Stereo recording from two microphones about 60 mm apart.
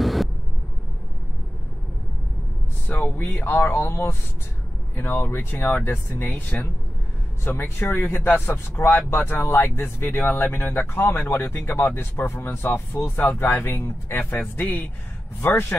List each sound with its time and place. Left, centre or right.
0.0 s vehicle: centre
3.0 s speech: left
7.4 s speech: left
9.5 s speech: left
13.2 s speech: left
13.7 s speech: left